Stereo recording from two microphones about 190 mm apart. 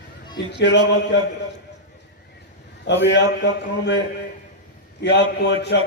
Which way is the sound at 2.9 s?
65° left (ahead or behind).